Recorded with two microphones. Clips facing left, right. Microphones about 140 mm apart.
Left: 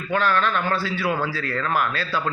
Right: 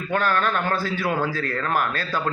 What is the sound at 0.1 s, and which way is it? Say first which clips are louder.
Speech: left 1 dB; 45° right (ahead or behind).